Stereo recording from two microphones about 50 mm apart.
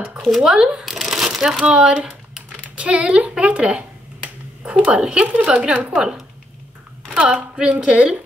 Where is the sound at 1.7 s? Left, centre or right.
Right.